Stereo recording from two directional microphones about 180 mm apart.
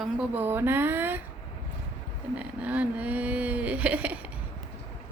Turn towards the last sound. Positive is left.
turn(degrees=-10)  # may be behind; listen again after turning